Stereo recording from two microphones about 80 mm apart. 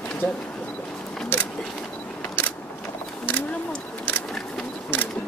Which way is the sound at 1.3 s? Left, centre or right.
Left.